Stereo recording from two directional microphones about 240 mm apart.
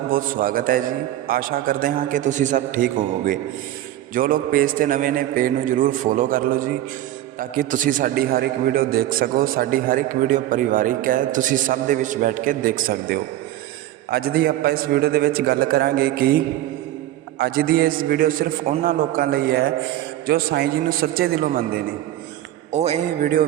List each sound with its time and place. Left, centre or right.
0.1 s a man's voice: right
17.3 s a man's voice: right
22.7 s a man's voice: right